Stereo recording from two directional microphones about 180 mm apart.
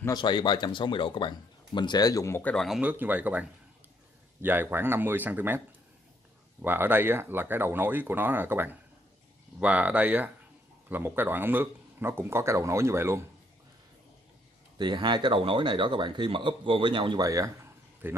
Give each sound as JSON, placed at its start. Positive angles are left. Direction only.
{"t": 0.0, "sound": "speech", "side_deg": 25}
{"t": 2.5, "sound": "speech", "side_deg": 0}
{"t": 6.6, "sound": "speech", "side_deg": -10}
{"t": 14.8, "sound": "speech", "side_deg": -25}